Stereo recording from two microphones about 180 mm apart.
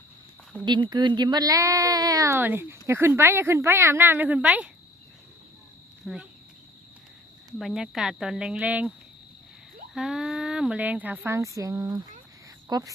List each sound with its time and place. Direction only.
0.6 s speech: 25° right (ahead or behind); by 4.7 s 5° right (ahead or behind)
6.0 s speech: centre (ahead or behind)
7.6 s speech: centre (ahead or behind)
9.9 s speech: centre (ahead or behind); by 12.9 s 20° right (ahead or behind)